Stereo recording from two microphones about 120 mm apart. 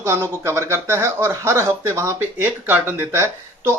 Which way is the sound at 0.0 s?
20° right (ahead or behind).